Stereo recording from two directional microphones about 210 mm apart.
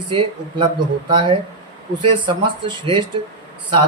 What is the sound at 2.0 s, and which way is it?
Speech, 25° right (ahead or behind).